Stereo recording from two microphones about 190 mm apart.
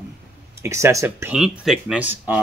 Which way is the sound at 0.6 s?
15° right (ahead or behind).